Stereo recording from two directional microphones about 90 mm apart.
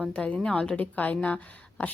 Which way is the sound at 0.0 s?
10° left (ahead or behind).